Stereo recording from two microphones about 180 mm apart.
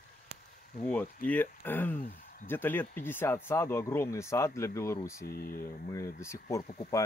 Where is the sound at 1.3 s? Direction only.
10° left (ahead or behind).